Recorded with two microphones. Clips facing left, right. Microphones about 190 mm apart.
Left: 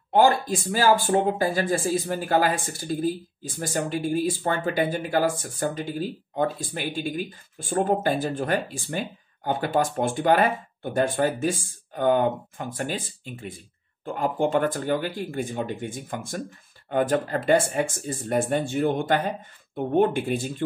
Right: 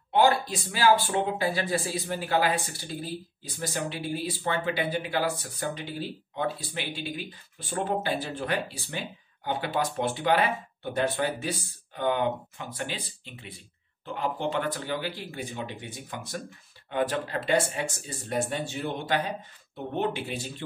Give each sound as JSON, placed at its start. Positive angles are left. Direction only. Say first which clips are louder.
{"t": 0.1, "sound": "speech", "louder": "left 3 dB", "side_deg": 45}